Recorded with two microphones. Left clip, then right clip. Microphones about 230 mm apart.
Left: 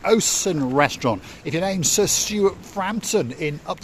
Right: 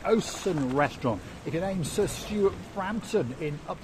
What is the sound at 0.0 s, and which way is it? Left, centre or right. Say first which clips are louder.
Speech: left 7 dB; left.